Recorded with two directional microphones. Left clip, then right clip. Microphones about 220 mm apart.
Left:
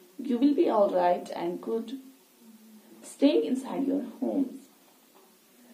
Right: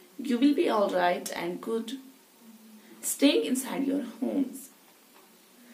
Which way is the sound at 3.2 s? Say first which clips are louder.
Even; 25° right (ahead or behind).